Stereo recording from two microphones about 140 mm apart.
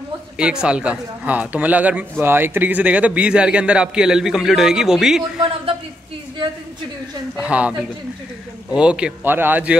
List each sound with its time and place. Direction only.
0.4 s speech: 5° right (ahead or behind)
7.3 s speech: 10° right (ahead or behind)
8.7 s speech: 5° right (ahead or behind)